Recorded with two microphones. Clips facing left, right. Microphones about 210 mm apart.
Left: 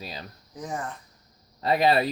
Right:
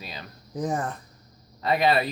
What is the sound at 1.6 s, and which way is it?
Speech, 35° left (ahead or behind).